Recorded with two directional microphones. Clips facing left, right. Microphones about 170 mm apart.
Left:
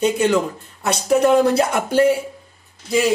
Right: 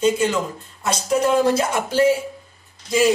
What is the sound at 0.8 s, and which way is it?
Speech, 65° left (ahead or behind).